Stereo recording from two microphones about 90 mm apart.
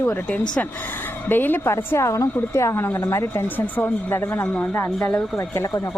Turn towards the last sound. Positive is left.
turn(degrees=35)  # may be behind; listen again after turning